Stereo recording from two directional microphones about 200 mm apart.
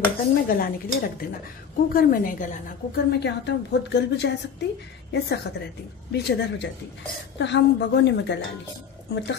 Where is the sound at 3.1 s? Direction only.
60° left (ahead or behind).